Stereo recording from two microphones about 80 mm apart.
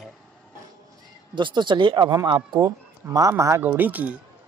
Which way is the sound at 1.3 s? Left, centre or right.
Right.